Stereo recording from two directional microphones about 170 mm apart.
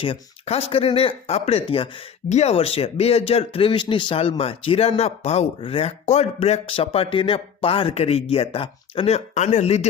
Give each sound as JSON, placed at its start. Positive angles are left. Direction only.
{"t": 0.0, "sound": "speech", "side_deg": 35}